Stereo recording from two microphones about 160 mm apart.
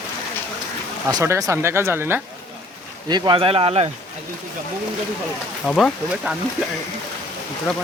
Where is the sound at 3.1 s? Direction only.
30° right (ahead or behind).